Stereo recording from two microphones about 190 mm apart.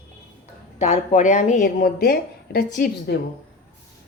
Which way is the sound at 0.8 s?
40° left (ahead or behind).